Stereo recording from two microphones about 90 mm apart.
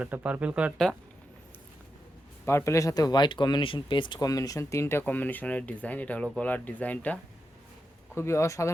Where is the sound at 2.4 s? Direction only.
30° left (ahead or behind); by 4.1 s 65° left (ahead or behind).